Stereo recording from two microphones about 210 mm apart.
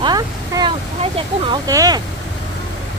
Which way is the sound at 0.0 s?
20° right (ahead or behind).